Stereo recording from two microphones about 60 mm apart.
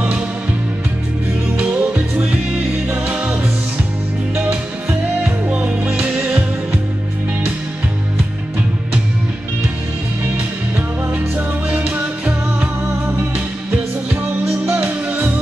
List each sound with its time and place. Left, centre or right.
1.6 s music: right
5.2 s music: right
11.1 s music: right
11.9 s music: centre
14.7 s music: right